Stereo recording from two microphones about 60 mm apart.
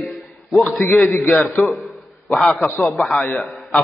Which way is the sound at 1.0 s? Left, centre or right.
Left.